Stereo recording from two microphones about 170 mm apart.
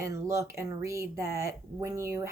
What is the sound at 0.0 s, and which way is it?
Speech, 15° right (ahead or behind).